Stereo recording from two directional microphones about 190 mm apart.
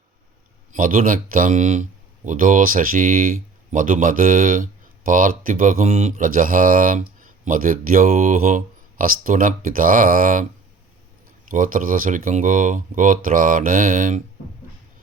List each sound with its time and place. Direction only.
0.7 s speech: 45° right (ahead or behind)
11.5 s speech: 45° right (ahead or behind)